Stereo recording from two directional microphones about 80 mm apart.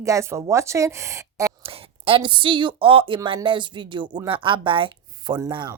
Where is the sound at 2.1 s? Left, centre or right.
Right.